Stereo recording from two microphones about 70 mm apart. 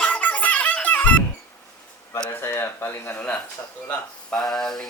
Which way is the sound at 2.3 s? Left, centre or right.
Left.